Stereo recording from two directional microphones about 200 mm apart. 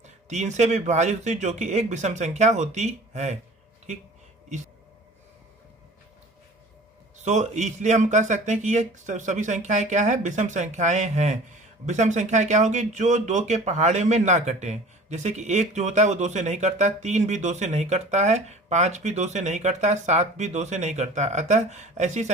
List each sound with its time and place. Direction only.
0.0 s speech: 35° right (ahead or behind)
4.4 s a sound: 35° right (ahead or behind)
7.2 s speech: 35° right (ahead or behind)